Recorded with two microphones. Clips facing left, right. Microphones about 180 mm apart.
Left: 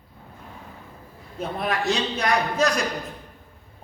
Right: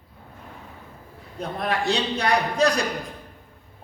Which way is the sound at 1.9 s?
35° right (ahead or behind).